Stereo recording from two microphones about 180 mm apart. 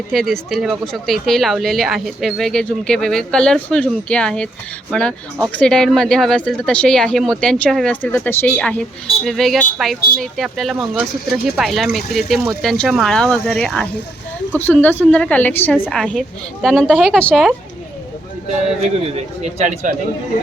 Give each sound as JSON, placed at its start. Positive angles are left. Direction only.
{"t": 0.1, "sound": "a woman's voice", "side_deg": 0}
{"t": 18.9, "sound": "speech", "side_deg": -35}